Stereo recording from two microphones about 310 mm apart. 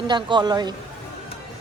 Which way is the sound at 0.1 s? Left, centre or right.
Centre.